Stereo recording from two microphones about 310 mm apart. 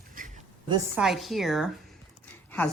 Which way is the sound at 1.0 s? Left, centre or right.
Centre.